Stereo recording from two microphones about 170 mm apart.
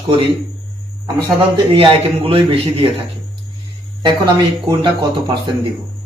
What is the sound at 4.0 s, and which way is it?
A man's voice, 25° right (ahead or behind).